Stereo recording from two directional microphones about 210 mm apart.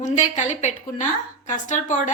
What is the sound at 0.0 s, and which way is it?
A woman's voice, 35° left (ahead or behind).